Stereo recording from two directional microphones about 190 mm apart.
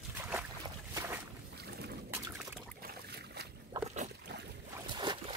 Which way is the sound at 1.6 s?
60° right (ahead or behind).